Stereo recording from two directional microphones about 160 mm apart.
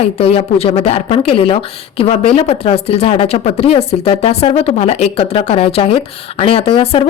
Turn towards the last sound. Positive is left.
turn(degrees=35)  # may be behind; listen again after turning